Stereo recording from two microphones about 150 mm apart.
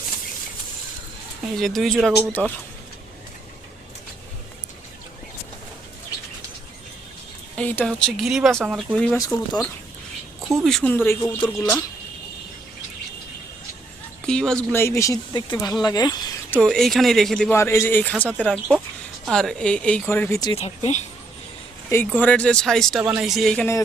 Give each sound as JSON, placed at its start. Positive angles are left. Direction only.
{"t": 1.5, "sound": "speech", "side_deg": 0}
{"t": 7.5, "sound": "speech", "side_deg": 10}
{"t": 9.0, "sound": "speech", "side_deg": 5}
{"t": 10.9, "sound": "speech", "side_deg": 15}
{"t": 14.3, "sound": "speech", "side_deg": 5}
{"t": 16.6, "sound": "speech", "side_deg": 0}
{"t": 17.5, "sound": "speech", "side_deg": 15}
{"t": 20.6, "sound": "speech", "side_deg": 45}
{"t": 21.8, "sound": "speech", "side_deg": 15}
{"t": 23.0, "sound": "speech", "side_deg": -10}
{"t": 23.3, "sound": "speech", "side_deg": 0}